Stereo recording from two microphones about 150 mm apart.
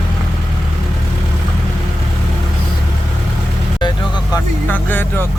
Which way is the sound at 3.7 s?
30° left (ahead or behind).